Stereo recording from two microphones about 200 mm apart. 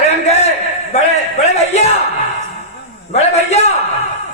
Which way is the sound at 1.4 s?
35° left (ahead or behind).